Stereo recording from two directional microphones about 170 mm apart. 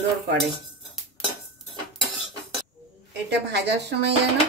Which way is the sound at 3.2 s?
85° right.